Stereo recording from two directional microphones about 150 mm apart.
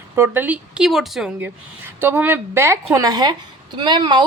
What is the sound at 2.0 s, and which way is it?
A woman's voice, 15° right (ahead or behind).